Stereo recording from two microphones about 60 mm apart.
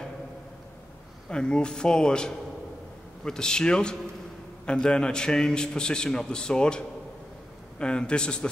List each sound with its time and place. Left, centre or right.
1.3 s a man's voice: centre
7.8 s a man's voice: centre